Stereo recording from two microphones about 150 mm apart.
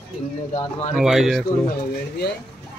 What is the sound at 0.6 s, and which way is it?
Speech, 40° left (ahead or behind).